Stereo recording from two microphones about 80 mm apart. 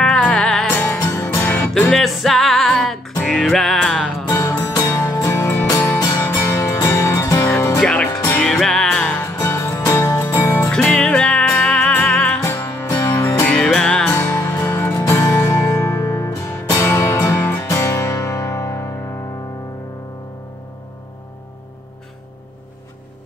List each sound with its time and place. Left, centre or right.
0.0 s music: centre
0.7 s music: left
0.9 s music: left
1.2 s music: left
1.9 s music: centre
4.3 s music: left
6.4 s music: left
7.8 s music: centre
9.2 s music: left
10.7 s music: centre
12.4 s music: left
13.7 s music: centre
14.1 s music: left